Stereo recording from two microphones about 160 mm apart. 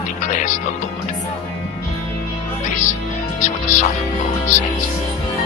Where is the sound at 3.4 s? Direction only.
50° left (ahead or behind).